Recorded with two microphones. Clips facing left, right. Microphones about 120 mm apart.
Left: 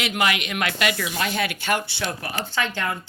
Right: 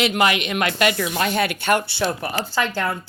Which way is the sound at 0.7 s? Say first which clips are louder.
Right 4 dB; 40° right (ahead or behind).